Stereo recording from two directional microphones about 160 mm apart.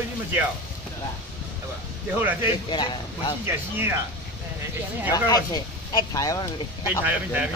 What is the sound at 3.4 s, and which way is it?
Speech, 15° right (ahead or behind).